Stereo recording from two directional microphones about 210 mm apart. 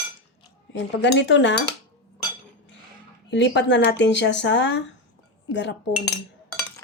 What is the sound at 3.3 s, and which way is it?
Speech, 55° left (ahead or behind).